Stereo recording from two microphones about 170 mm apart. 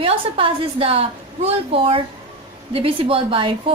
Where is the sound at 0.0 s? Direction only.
30° right (ahead or behind).